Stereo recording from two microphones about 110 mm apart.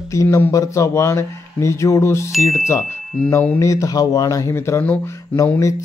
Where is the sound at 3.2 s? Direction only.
10° left (ahead or behind).